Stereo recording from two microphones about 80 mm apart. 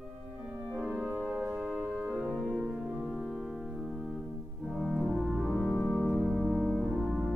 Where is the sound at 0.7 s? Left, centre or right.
Centre.